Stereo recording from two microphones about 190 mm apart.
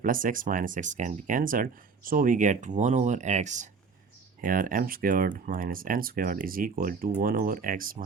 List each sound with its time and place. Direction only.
0.0 s speech: 45° right (ahead or behind)